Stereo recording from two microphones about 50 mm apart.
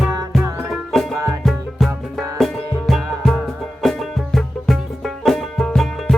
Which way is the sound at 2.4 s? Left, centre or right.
Centre.